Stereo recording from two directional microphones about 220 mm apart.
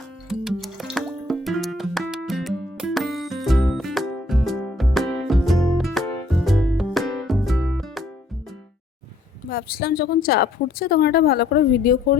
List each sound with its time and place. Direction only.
0.3 s music: centre (ahead or behind)
9.5 s speech: 45° left (ahead or behind)